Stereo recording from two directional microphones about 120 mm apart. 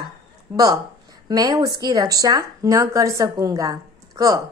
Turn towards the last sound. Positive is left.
turn(degrees=-30)  # may be behind; listen again after turning